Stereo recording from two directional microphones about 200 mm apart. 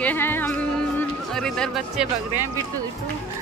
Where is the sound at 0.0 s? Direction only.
10° left (ahead or behind).